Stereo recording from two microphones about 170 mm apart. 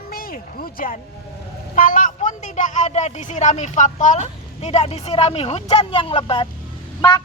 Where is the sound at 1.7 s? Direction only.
50° left (ahead or behind); by 6.5 s 30° left (ahead or behind).